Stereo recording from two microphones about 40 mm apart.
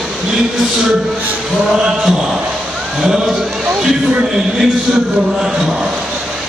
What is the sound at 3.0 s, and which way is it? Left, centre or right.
A man's voice, centre.